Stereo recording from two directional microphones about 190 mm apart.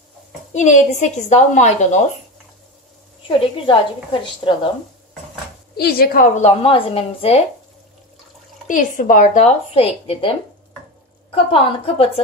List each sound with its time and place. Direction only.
0.5 s a woman's voice: 40° left (ahead or behind)
3.3 s a woman's voice: 25° left (ahead or behind)
5.8 s a woman's voice: 50° left (ahead or behind); by 7.4 s 30° left (ahead or behind)
8.6 s a woman's voice: 45° left (ahead or behind)
11.3 s a woman's voice: 30° left (ahead or behind)